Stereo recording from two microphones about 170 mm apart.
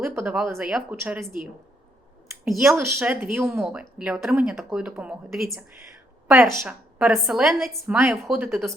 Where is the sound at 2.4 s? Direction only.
Centre (ahead or behind).